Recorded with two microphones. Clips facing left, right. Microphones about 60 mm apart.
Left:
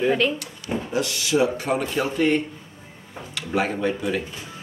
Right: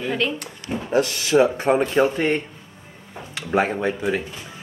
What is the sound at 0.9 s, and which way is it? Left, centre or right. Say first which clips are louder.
A man's voice: right 5 dB; right.